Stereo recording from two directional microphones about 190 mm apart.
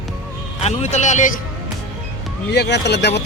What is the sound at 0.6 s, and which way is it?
Speech, 35° left (ahead or behind).